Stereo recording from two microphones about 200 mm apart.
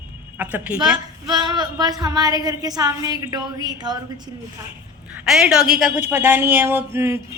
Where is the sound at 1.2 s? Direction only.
20° right (ahead or behind).